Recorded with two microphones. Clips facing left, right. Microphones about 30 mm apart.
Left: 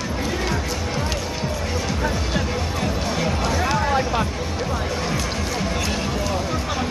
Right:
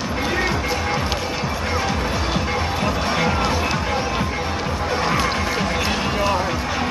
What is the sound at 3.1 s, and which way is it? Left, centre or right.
Music, right.